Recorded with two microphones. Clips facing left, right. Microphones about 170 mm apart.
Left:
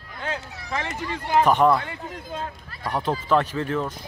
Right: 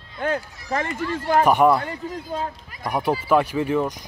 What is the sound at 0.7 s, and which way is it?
Speech, 50° right (ahead or behind).